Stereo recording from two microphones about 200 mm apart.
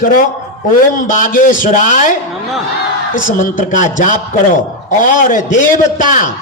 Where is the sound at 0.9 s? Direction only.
40° left (ahead or behind).